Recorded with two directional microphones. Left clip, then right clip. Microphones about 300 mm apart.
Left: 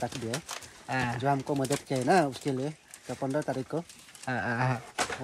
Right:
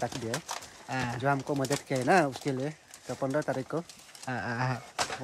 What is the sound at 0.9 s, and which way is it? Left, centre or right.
Speech, centre.